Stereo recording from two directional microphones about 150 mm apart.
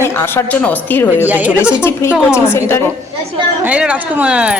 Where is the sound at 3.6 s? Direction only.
10° right (ahead or behind).